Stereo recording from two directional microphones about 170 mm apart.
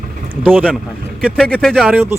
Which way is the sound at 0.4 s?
10° right (ahead or behind).